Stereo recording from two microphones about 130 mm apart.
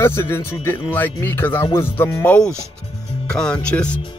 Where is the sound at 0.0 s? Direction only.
20° left (ahead or behind).